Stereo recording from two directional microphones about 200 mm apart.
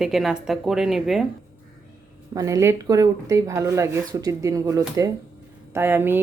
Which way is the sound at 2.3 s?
15° right (ahead or behind).